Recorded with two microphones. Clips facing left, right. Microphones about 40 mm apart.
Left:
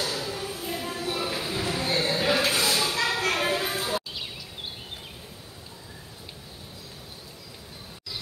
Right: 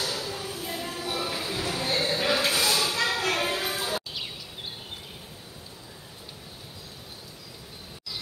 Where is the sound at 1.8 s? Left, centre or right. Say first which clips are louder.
Even; left.